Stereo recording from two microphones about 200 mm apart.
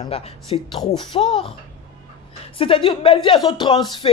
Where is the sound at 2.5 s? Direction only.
25° left (ahead or behind).